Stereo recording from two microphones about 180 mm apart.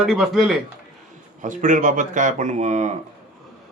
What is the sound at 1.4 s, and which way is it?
Speech, 45° right (ahead or behind).